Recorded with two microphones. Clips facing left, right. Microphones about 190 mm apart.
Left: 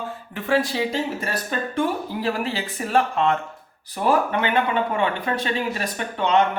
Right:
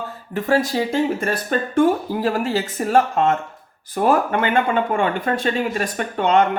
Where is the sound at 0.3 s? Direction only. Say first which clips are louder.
Right 3 dB; 40° right (ahead or behind).